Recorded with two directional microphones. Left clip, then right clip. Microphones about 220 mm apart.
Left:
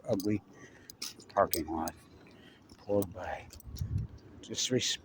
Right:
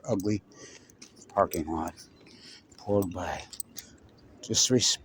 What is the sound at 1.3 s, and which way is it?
Speech, 30° right (ahead or behind).